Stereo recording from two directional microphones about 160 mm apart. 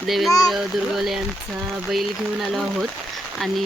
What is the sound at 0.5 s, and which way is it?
Speech, centre (ahead or behind).